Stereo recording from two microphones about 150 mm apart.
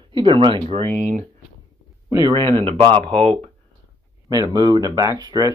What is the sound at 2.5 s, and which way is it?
Speech, 35° right (ahead or behind).